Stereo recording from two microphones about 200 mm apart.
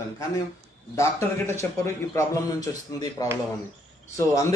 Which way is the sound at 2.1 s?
15° left (ahead or behind).